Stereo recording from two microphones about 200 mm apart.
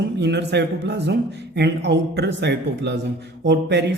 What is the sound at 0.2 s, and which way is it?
A man's voice, 60° right (ahead or behind).